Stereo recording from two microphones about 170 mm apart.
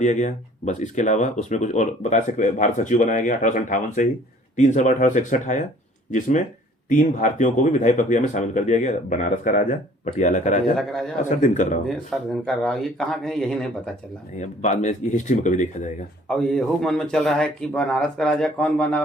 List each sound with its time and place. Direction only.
0.0 s speech: 45° left (ahead or behind)
11.9 s speech: 5° left (ahead or behind)
14.3 s speech: 45° left (ahead or behind)
16.3 s speech: 5° left (ahead or behind)